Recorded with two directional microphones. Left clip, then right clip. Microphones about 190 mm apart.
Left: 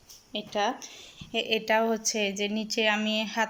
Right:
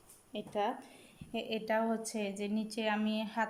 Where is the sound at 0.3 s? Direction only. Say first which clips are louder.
Left 7 dB; 5° right (ahead or behind).